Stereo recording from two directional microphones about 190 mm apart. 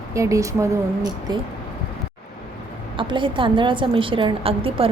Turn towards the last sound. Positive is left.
turn(degrees=-30)  # may be behind; listen again after turning